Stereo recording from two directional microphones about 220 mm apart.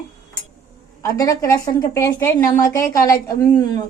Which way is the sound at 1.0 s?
15° left (ahead or behind).